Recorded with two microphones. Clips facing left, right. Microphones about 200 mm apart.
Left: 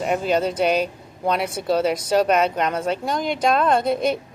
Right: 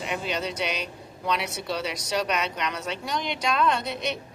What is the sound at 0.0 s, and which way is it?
Speech, 45° left (ahead or behind).